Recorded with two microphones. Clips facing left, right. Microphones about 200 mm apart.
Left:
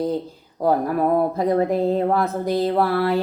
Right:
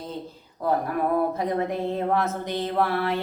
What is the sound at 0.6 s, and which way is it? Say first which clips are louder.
Speech: left 5 dB; 40° left (ahead or behind).